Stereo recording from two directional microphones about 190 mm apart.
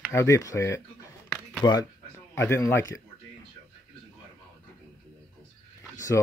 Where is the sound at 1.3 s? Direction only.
5° left (ahead or behind).